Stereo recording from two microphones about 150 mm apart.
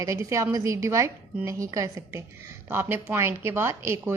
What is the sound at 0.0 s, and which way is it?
A woman's voice, 20° right (ahead or behind).